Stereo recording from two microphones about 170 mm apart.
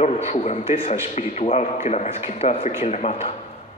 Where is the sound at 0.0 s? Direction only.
40° left (ahead or behind).